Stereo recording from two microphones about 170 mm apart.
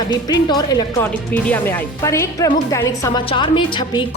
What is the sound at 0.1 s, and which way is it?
Speech, 25° left (ahead or behind).